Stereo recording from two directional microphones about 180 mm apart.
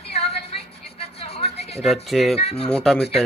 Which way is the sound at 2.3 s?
35° left (ahead or behind).